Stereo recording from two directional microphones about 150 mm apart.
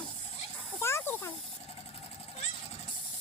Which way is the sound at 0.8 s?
15° left (ahead or behind).